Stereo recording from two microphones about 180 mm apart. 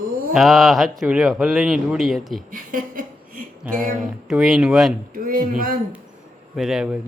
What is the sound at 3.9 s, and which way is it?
Speech, 5° right (ahead or behind).